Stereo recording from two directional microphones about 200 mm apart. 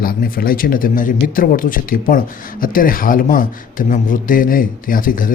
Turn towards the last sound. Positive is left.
turn(degrees=45)  # may be behind; listen again after turning